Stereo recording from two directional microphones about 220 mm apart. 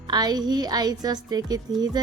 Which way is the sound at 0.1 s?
20° right (ahead or behind).